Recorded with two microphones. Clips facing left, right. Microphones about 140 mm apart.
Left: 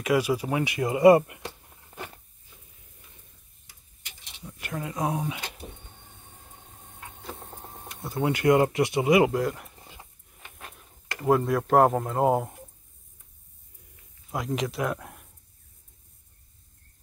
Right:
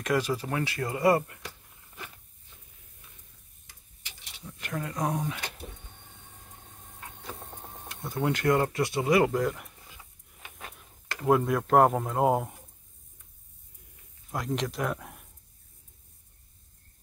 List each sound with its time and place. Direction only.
0.0 s speech: 10° left (ahead or behind)
4.4 s speech: 10° left (ahead or behind)
7.0 s tick-tock: 5° left (ahead or behind)
9.8 s dog: 30° left (ahead or behind)
10.4 s speech: centre (ahead or behind)
14.3 s speech: 5° left (ahead or behind)